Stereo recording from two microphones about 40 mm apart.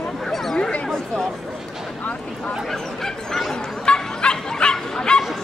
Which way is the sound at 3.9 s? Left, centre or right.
Left.